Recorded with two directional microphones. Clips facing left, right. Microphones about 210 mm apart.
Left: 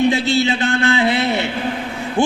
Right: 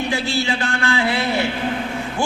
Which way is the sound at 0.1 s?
20° left (ahead or behind).